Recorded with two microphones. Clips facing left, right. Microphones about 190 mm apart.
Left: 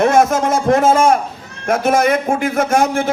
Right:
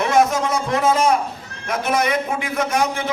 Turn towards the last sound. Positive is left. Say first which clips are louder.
# left 6 dB
turn(degrees=50)  # may be behind; listen again after turning